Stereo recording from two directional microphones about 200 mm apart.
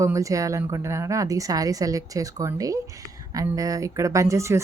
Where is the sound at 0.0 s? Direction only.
15° right (ahead or behind).